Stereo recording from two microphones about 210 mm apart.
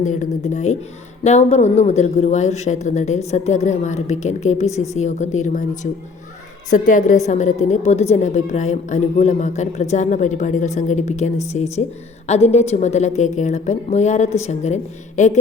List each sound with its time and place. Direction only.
0.0 s a woman's voice: 35° left (ahead or behind)